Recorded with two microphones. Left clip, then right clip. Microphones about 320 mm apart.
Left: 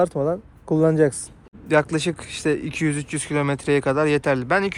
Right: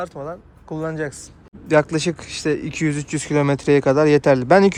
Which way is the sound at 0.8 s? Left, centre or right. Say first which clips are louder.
Left 8 dB; centre.